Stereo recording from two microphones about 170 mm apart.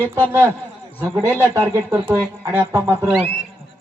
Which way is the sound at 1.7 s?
15° right (ahead or behind).